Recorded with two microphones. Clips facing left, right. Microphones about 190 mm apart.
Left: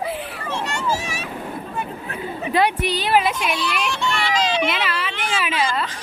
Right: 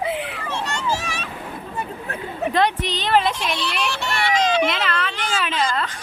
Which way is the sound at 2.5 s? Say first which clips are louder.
Left 2 dB; 10° left (ahead or behind).